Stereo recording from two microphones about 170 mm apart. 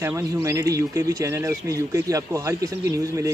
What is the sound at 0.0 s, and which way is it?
Speech, 15° right (ahead or behind).